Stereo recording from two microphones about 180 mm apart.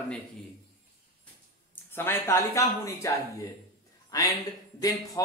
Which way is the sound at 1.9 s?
15° left (ahead or behind).